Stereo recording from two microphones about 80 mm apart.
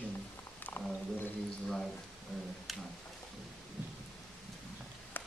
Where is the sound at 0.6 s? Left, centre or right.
Left.